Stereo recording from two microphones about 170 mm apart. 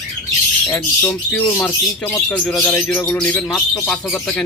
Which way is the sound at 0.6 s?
10° left (ahead or behind).